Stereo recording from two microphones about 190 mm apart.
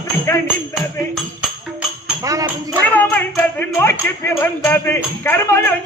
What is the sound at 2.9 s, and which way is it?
Speech, 10° left (ahead or behind).